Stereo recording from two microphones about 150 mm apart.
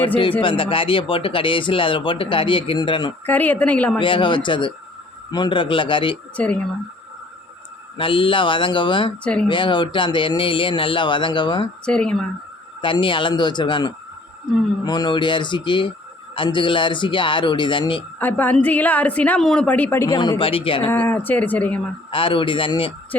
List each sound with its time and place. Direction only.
0.4 s speech: 35° left (ahead or behind)
3.2 s a woman's voice: 10° left (ahead or behind)
4.0 s speech: 35° left (ahead or behind)
6.3 s a woman's voice: 10° left (ahead or behind)
7.9 s speech: 35° left (ahead or behind)
9.2 s a woman's voice: 5° left (ahead or behind)
9.5 s speech: 30° left (ahead or behind)
11.9 s a woman's voice: 5° left (ahead or behind)
12.8 s speech: 35° left (ahead or behind)
18.2 s a woman's voice: 10° left (ahead or behind)
20.4 s speech: 35° left (ahead or behind)
20.9 s a woman's voice: 10° left (ahead or behind)
22.1 s speech: 35° left (ahead or behind)